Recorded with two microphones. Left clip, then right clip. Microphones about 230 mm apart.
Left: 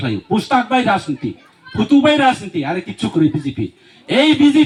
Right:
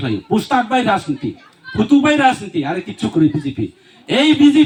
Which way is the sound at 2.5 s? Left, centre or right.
Left.